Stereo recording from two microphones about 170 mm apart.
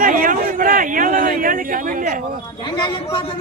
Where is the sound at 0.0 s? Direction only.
55° right (ahead or behind).